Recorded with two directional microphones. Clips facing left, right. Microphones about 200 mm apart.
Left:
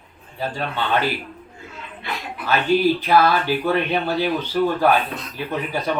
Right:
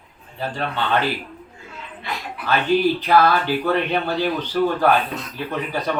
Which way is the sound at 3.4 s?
15° left (ahead or behind).